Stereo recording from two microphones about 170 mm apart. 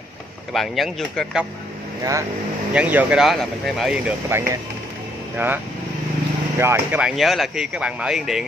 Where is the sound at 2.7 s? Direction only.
10° right (ahead or behind).